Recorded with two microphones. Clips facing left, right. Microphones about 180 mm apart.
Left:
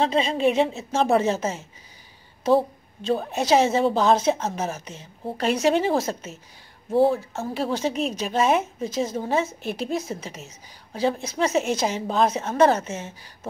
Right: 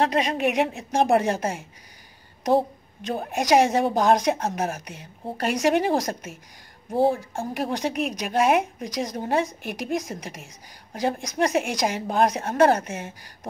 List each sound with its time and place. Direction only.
0.4 s a woman's voice: 15° right (ahead or behind)
2.4 s a sound: 15° right (ahead or behind)
3.3 s a woman's voice: 15° right (ahead or behind)